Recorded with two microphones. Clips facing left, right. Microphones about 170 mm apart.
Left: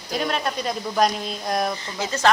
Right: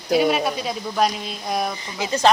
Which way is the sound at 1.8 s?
15° right (ahead or behind).